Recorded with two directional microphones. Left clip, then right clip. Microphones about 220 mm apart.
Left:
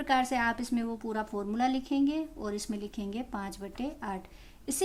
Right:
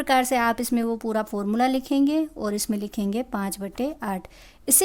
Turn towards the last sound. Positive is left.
turn(degrees=-45)  # may be behind; listen again after turning